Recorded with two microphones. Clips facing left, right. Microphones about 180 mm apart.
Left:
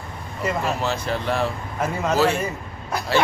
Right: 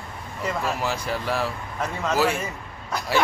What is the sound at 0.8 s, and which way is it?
Speech, 10° right (ahead or behind).